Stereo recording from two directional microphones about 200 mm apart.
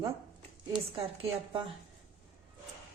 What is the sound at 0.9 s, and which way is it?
Speech, 30° right (ahead or behind).